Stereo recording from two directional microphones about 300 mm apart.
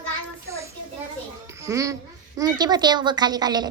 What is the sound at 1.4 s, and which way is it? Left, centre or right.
A woman's voice, centre.